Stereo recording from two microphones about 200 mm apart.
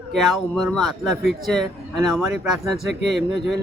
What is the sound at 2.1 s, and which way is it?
Speech, centre (ahead or behind).